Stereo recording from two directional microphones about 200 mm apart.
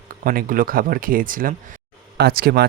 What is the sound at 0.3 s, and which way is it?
Speech, 45° right (ahead or behind).